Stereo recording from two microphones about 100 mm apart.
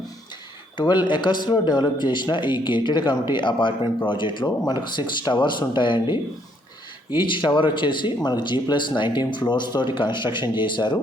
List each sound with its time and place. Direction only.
0.8 s speech: 50° left (ahead or behind)